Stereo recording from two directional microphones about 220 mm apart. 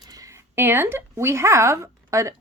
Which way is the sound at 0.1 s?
15° right (ahead or behind).